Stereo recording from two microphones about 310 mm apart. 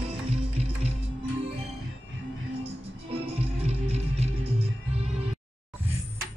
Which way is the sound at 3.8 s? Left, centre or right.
Centre.